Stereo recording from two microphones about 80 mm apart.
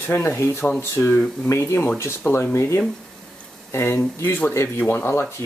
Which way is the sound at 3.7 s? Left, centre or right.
Left.